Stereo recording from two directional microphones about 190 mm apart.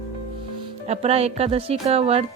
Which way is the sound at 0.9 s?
35° right (ahead or behind).